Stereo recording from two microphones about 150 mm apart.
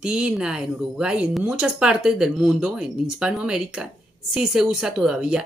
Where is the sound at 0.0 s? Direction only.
5° right (ahead or behind).